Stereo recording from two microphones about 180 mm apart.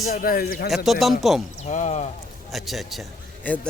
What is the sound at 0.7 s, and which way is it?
Speech, centre (ahead or behind).